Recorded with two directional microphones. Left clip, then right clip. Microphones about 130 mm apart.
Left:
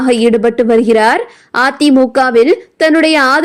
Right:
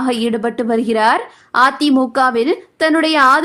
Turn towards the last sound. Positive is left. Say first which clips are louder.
# left 2 dB
turn(degrees=25)  # may be behind; listen again after turning